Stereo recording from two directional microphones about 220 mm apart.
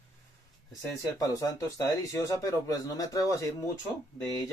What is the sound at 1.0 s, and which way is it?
Speech, 15° left (ahead or behind).